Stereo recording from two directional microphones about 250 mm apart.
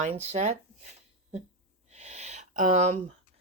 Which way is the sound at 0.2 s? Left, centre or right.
Right.